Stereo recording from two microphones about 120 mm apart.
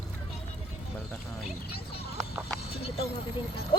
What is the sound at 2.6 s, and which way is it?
A woman's voice, 55° left (ahead or behind).